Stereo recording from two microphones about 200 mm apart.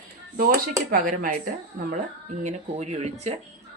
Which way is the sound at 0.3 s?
50° right (ahead or behind).